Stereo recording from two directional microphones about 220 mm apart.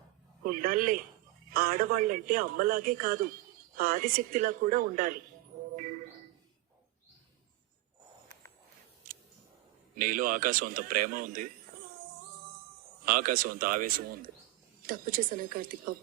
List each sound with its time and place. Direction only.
0.4 s speech: 40° right (ahead or behind)
9.9 s speech: 40° right (ahead or behind)
13.1 s speech: 40° right (ahead or behind)